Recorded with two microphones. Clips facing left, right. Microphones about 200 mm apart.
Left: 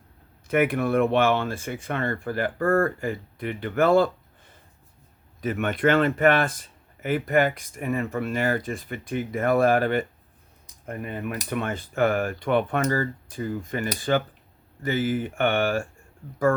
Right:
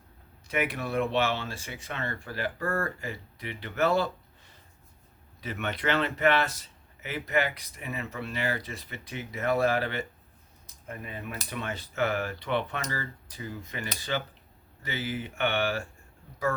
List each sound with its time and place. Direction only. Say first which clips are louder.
0.4 s speech: left 9 dB; 55° left (ahead or behind)
5.4 s speech: left 9 dB; 50° left (ahead or behind)